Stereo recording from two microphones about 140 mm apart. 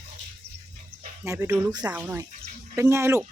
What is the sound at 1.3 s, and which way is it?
Speech, 20° right (ahead or behind).